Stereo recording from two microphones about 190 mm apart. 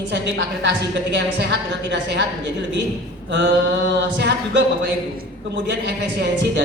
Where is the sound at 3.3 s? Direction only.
70° right (ahead or behind).